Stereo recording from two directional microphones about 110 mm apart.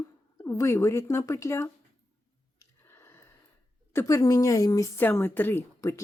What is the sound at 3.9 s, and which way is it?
Speech, 30° left (ahead or behind).